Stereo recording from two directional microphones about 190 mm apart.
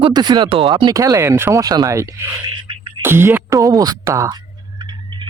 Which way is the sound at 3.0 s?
10° right (ahead or behind).